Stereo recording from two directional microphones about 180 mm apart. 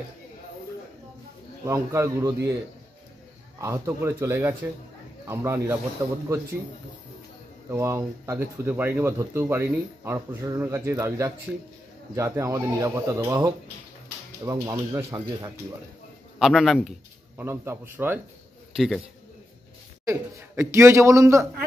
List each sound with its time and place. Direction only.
1.6 s speech: 15° right (ahead or behind)
3.6 s speech: 15° right (ahead or behind)
7.7 s speech: 15° right (ahead or behind)
16.3 s a man's voice: centre (ahead or behind)
17.4 s speech: 15° right (ahead or behind)
20.1 s speech: 15° right (ahead or behind)